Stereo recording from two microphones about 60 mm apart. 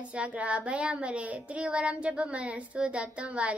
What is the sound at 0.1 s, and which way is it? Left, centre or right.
Child singing, right.